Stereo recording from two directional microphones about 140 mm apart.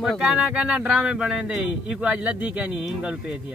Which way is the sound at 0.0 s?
5° right (ahead or behind).